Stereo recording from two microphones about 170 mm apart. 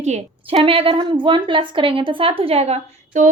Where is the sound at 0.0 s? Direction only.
35° right (ahead or behind).